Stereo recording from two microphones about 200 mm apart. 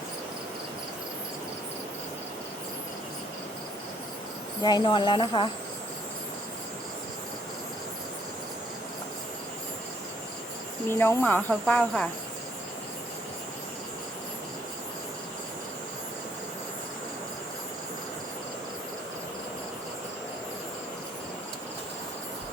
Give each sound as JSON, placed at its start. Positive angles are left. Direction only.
{"t": 4.6, "sound": "speech", "side_deg": 20}
{"t": 10.8, "sound": "cricket", "side_deg": 10}